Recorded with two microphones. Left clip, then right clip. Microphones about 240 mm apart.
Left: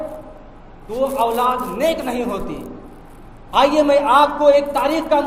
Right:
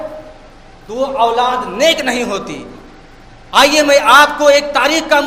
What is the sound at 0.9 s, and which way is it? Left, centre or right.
A man's voice, right.